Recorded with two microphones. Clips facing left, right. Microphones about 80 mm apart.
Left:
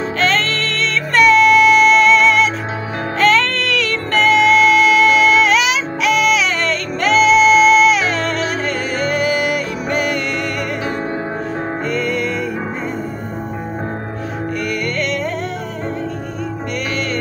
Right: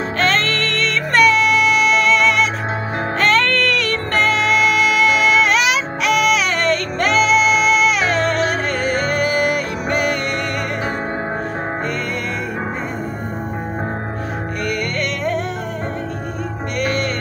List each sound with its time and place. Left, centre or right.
0.2 s music: right